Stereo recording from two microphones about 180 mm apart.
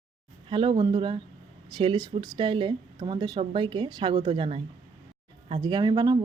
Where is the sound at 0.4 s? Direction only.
25° right (ahead or behind).